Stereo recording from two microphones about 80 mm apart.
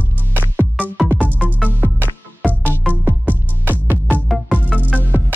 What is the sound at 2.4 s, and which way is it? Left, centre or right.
Music, centre.